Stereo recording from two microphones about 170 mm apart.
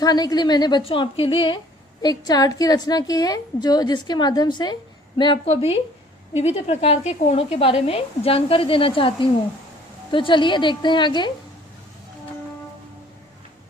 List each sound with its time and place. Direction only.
0.0 s a woman's voice: 25° left (ahead or behind)